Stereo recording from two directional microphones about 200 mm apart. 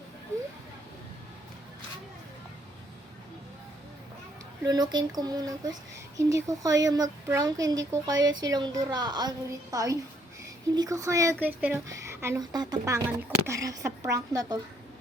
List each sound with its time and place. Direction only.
4.6 s speech: 20° right (ahead or behind)